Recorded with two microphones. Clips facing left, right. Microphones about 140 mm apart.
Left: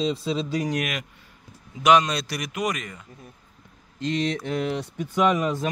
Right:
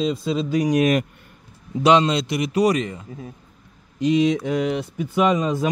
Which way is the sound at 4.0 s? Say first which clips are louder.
Right 8 dB; 10° right (ahead or behind).